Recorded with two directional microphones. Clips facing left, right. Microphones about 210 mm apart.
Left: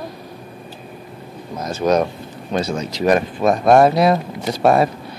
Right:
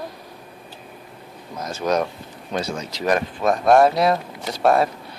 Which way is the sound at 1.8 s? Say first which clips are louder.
Left 5 dB; 35° left (ahead or behind).